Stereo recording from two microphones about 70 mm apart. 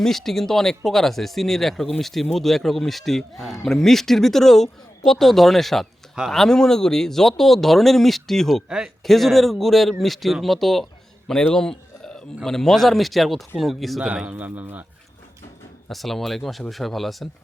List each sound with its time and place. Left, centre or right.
0.0 s speech: centre
14.3 s speech: right
15.9 s speech: centre